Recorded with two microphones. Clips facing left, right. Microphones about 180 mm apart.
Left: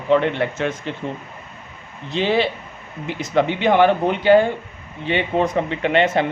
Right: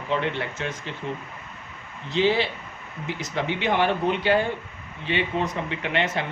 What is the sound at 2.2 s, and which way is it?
A man's voice, 60° left (ahead or behind).